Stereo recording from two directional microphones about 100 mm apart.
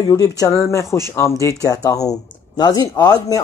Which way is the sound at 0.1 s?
35° left (ahead or behind).